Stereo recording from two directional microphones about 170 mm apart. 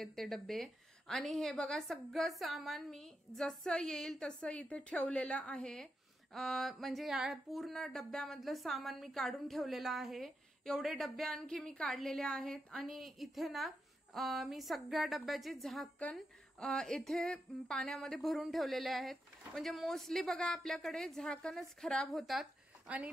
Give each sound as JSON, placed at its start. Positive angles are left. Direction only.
{"t": 0.0, "sound": "speech", "side_deg": 0}